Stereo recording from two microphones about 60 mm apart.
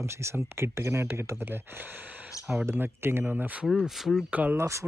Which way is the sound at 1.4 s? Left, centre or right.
Right.